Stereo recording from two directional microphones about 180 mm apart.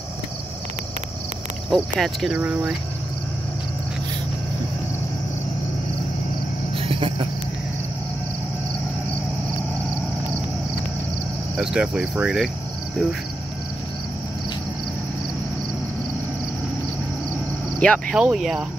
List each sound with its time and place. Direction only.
1.7 s speech: centre (ahead or behind)
6.8 s cricket: 30° right (ahead or behind)
11.5 s speech: 5° right (ahead or behind)
17.7 s speech: 5° left (ahead or behind)